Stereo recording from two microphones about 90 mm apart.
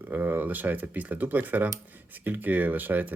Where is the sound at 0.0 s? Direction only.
20° right (ahead or behind).